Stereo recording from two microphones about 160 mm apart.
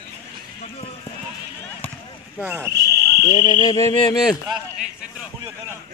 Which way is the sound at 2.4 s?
10° right (ahead or behind).